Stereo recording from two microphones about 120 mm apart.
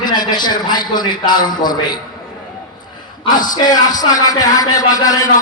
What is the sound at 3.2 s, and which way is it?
Music, 35° left (ahead or behind).